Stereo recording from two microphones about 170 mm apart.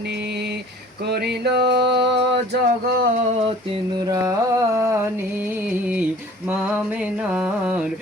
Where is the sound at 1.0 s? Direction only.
75° right (ahead or behind).